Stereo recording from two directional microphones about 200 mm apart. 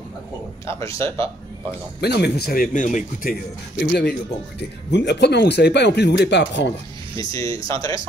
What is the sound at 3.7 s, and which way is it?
Speech, 55° left (ahead or behind).